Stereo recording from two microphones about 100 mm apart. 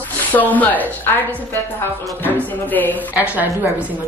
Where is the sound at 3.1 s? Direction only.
15° right (ahead or behind).